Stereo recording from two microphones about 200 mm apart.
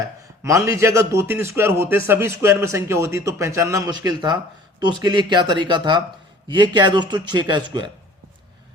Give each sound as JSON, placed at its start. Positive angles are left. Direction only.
{"t": 0.4, "sound": "a man's voice", "side_deg": -15}